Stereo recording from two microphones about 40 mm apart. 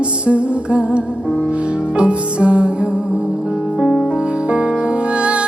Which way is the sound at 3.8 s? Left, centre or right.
Centre.